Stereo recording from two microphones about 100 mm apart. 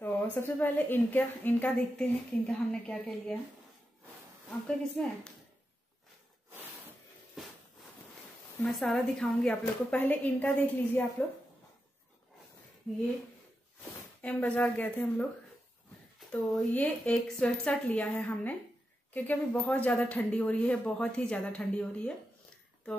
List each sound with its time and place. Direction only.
0.0 s a woman's voice: 20° left (ahead or behind)
4.5 s a woman's voice: 10° left (ahead or behind)
7.4 s a sound: 5° right (ahead or behind)
8.6 s a woman's voice: 5° left (ahead or behind)
14.2 s a woman's voice: 15° left (ahead or behind)
16.3 s a woman's voice: 15° left (ahead or behind)